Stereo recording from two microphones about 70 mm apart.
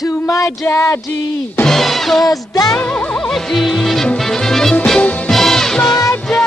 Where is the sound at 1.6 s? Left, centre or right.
Centre.